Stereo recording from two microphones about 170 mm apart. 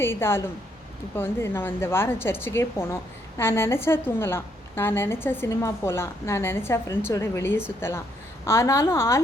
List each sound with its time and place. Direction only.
0.0 s a woman's voice: 15° left (ahead or behind)